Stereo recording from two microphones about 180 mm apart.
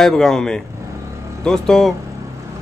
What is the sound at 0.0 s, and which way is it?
A man's voice, 5° left (ahead or behind).